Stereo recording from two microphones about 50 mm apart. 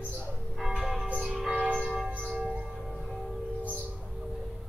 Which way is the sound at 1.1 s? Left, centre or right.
Centre.